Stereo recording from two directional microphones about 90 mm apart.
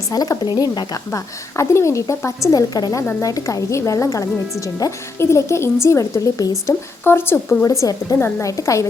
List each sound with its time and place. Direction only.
0.1 s a woman's voice: 45° left (ahead or behind)
7.0 s a woman's voice: 25° left (ahead or behind)
7.6 s a woman's voice: 35° left (ahead or behind)